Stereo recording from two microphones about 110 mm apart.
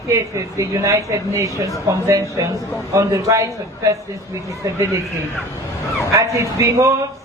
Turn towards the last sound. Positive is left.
turn(degrees=-25)  # may be behind; listen again after turning